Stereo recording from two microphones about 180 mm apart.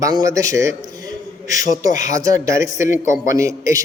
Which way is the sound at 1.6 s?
45° left (ahead or behind).